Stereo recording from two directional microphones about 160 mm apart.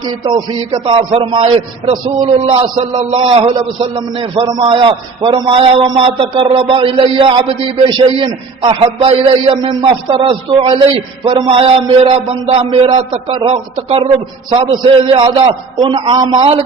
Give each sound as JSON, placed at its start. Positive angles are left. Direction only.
{"t": 0.3, "sound": "a man's voice", "side_deg": -30}
{"t": 3.0, "sound": "a man's voice", "side_deg": -45}
{"t": 3.2, "sound": "a man's voice", "side_deg": -30}